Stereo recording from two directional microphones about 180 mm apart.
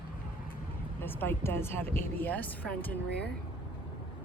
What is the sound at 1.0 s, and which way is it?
Speech, 10° left (ahead or behind).